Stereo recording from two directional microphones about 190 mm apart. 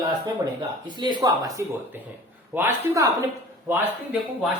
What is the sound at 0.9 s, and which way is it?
Speech, 25° right (ahead or behind).